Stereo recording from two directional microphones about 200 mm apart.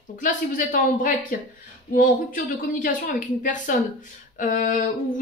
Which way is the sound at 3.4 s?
40° left (ahead or behind).